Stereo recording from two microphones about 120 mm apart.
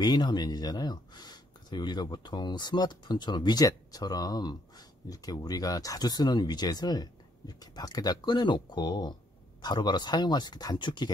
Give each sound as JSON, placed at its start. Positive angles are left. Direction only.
{"t": 0.0, "sound": "speech", "side_deg": 35}